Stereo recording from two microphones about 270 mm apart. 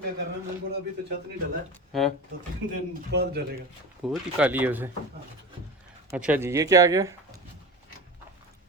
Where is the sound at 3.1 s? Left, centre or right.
Right.